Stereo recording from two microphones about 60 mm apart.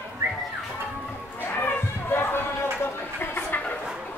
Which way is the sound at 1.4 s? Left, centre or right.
Left.